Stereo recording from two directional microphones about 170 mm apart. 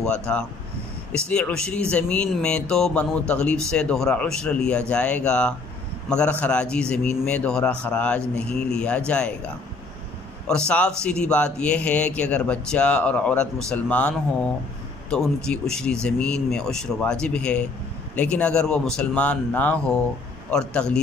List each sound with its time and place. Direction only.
0.0 s a man's voice: 5° left (ahead or behind)
10.7 s speech: 5° left (ahead or behind)